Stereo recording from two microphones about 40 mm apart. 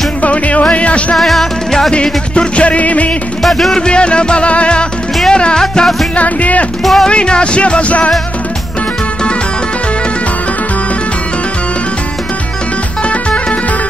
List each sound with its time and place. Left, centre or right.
0.2 s music: left
1.1 s music: centre
2.0 s music: left
3.4 s music: centre
3.7 s music: left
6.1 s music: left
6.8 s speech: centre
7.1 s music: left